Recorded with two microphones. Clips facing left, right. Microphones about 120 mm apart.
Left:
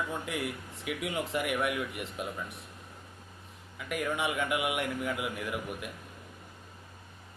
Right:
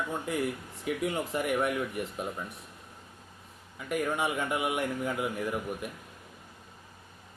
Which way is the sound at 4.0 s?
35° right (ahead or behind).